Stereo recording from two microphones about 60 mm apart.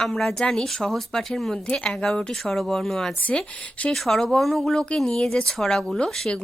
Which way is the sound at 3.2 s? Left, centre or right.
Left.